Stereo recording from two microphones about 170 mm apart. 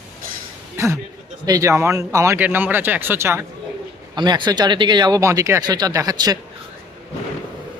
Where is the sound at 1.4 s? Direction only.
20° right (ahead or behind).